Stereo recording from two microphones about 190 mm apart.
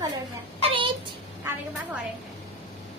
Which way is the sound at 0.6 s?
30° right (ahead or behind).